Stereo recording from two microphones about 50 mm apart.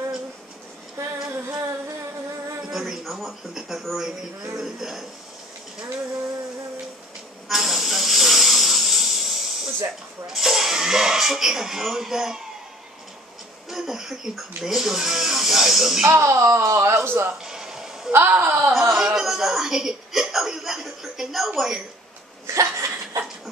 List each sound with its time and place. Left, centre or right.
0.9 s female singing: right
2.7 s speech: centre
7.4 s a sound: centre
10.3 s speech: centre
13.7 s speech: centre
16.0 s speech: right
17.0 s speech: right
17.5 s music: centre
18.1 s a woman's voice: right
18.7 s a woman's voice: centre
22.5 s laughter: right